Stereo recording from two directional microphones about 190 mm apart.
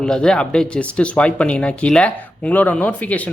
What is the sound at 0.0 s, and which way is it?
Speech, 5° left (ahead or behind).